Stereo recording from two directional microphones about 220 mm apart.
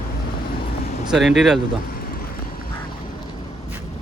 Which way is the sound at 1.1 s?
Centre (ahead or behind).